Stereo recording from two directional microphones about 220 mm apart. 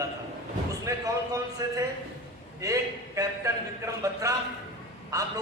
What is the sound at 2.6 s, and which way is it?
A man's voice, 15° right (ahead or behind).